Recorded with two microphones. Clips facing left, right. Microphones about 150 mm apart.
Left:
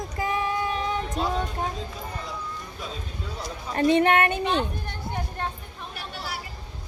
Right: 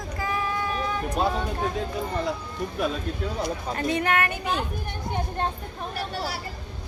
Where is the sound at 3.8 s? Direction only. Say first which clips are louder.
Left 6 dB; 25° left (ahead or behind).